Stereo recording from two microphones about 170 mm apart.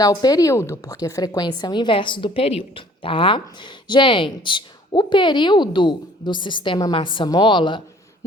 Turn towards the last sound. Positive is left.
turn(degrees=30)  # may be behind; listen again after turning